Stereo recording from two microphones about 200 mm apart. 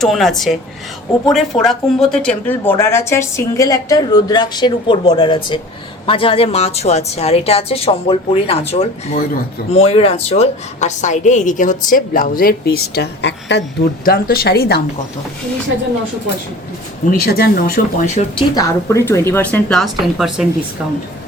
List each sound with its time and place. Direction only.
0.0 s a woman's voice: centre (ahead or behind)
1.6 s a woman's voice: centre (ahead or behind); by 14.8 s 55° left (ahead or behind)
17.1 s a woman's voice: 50° left (ahead or behind)
18.0 s speech: 35° left (ahead or behind)
18.5 s a woman's voice: 15° left (ahead or behind); by 20.5 s centre (ahead or behind)